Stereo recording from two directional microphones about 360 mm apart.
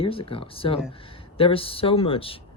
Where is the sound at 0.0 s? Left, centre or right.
Centre.